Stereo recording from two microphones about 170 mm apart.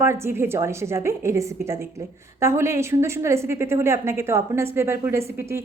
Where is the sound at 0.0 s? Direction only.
15° right (ahead or behind).